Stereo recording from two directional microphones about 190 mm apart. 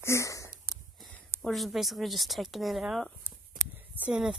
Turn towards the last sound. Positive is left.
turn(degrees=-5)  # may be behind; listen again after turning